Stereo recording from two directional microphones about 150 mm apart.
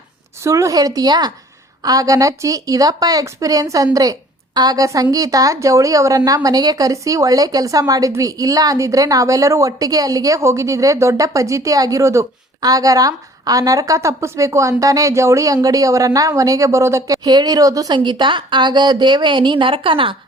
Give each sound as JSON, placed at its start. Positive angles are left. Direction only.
{"t": 0.4, "sound": "a woman's voice", "side_deg": -20}